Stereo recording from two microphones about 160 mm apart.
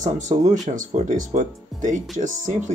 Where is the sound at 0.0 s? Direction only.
50° right (ahead or behind).